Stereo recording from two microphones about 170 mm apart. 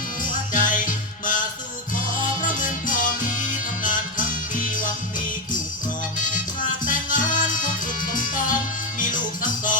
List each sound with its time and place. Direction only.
0.2 s music: 50° left (ahead or behind)
2.4 s music: 50° left (ahead or behind)
6.8 s music: 50° left (ahead or behind)